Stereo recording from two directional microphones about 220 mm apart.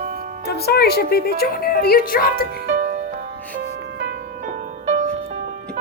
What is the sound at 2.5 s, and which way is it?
Music, 45° right (ahead or behind).